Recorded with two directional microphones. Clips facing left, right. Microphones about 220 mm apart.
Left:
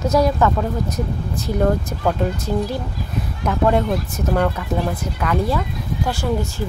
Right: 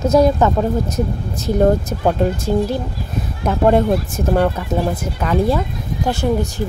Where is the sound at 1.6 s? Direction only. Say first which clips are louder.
Right 4 dB; 30° right (ahead or behind).